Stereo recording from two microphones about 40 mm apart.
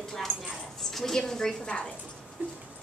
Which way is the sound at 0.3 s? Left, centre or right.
Right.